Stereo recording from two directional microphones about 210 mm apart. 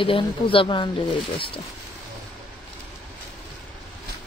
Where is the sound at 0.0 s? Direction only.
25° left (ahead or behind).